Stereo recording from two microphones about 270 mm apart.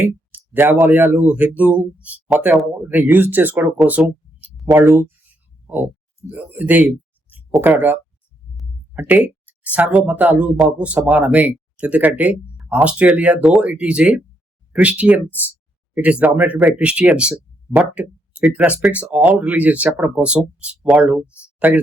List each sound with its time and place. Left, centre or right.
0.0 s speech: centre